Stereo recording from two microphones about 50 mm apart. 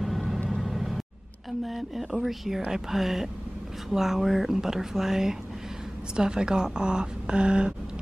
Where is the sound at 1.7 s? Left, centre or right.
Centre.